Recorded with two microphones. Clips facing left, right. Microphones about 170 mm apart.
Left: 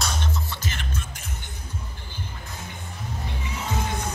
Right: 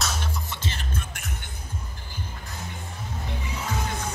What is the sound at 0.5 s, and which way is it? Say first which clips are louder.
Music: even; 30° right (ahead or behind).